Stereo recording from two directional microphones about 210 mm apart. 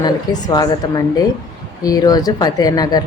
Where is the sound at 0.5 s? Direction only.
20° left (ahead or behind).